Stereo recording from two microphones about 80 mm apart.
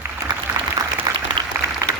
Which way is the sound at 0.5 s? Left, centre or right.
Right.